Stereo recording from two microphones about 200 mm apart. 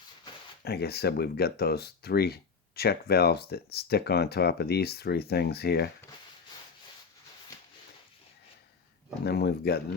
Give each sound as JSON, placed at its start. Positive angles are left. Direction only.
{"t": 0.6, "sound": "speech", "side_deg": 50}
{"t": 9.2, "sound": "speech", "side_deg": 55}